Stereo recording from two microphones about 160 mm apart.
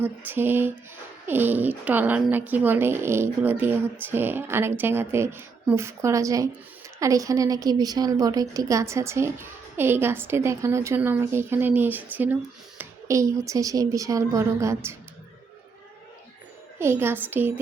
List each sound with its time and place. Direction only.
0.0 s a woman's voice: 10° right (ahead or behind)
16.7 s a woman's voice: 15° right (ahead or behind)